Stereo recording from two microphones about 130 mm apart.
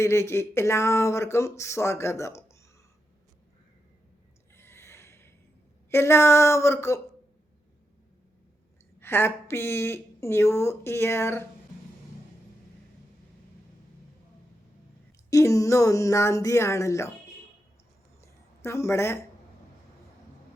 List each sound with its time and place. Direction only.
0.0 s speech: 20° left (ahead or behind)
4.5 s a sound: 20° left (ahead or behind)
5.9 s speech: 20° left (ahead or behind)
9.0 s speech: 20° left (ahead or behind)
15.3 s speech: 25° left (ahead or behind)
18.2 s a sound: 20° left (ahead or behind)